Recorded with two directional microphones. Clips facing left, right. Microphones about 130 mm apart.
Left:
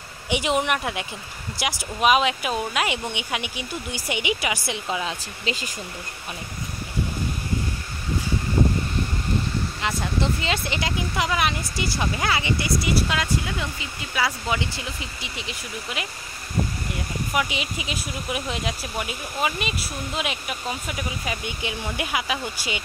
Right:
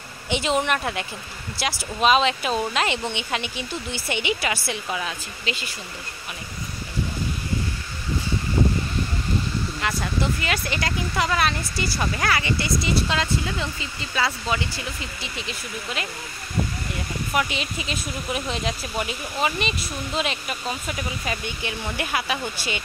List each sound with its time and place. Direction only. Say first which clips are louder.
0.3 s speech: even; 15° left (ahead or behind)
5.4 s speech: left 2 dB; 40° left (ahead or behind)
9.8 s speech: even; 20° left (ahead or behind)
17.3 s speech: right 1 dB; 10° left (ahead or behind)